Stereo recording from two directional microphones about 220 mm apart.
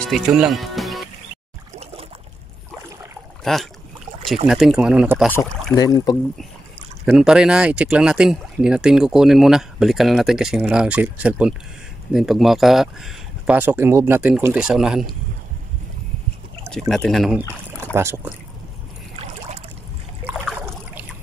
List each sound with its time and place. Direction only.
0.1 s speech: centre (ahead or behind)
3.5 s speech: centre (ahead or behind)
5.8 s speech: 15° left (ahead or behind)
7.1 s speech: 5° right (ahead or behind)
16.9 s speech: centre (ahead or behind)
17.9 s speech: 10° right (ahead or behind)
20.5 s boat: 10° right (ahead or behind)